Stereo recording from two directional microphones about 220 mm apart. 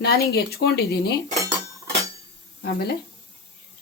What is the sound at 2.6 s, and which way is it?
Speech, 45° left (ahead or behind).